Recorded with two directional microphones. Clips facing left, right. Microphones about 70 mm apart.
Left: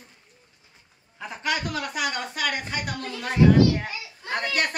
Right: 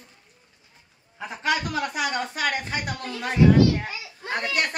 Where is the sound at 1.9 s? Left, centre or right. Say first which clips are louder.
Right 2 dB; centre.